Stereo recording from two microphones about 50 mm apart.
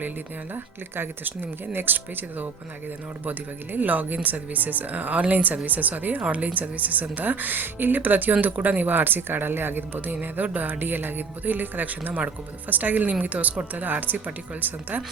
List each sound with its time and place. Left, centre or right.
0.5 s speech: right